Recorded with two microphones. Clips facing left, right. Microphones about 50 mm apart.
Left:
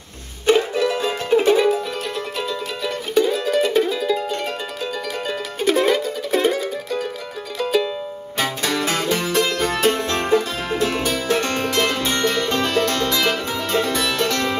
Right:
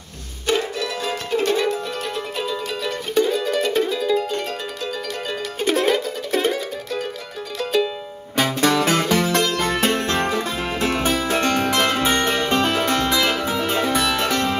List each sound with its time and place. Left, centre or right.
0.7 s music: left
2.3 s music: centre
5.6 s music: centre
8.5 s music: right
9.3 s music: right
11.8 s music: centre